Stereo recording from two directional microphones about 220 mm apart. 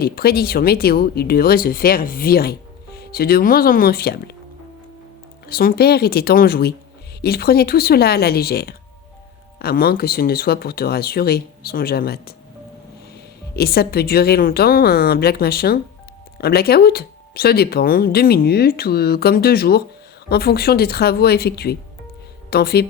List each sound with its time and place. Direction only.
0.0 s speech: 45° left (ahead or behind)
5.5 s speech: 45° left (ahead or behind)
13.6 s speech: 45° left (ahead or behind)